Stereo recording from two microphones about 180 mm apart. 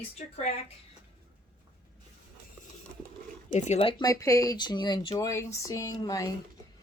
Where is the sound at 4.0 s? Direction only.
20° left (ahead or behind).